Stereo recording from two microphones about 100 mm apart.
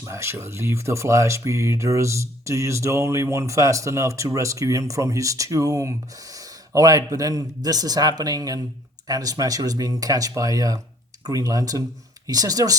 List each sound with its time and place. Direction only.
0.0 s a man's voice: 25° right (ahead or behind)